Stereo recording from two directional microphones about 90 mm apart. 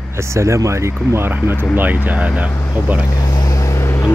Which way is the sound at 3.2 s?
40° left (ahead or behind).